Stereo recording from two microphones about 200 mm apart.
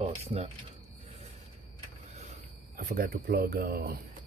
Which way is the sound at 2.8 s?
45° right (ahead or behind).